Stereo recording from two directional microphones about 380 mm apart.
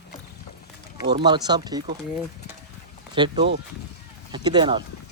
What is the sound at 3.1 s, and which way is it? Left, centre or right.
Speech, centre.